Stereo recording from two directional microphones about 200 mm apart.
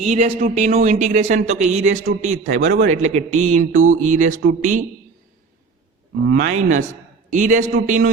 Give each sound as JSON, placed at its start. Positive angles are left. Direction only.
{"t": 0.0, "sound": "speech", "side_deg": -30}
{"t": 6.2, "sound": "a man's voice", "side_deg": -40}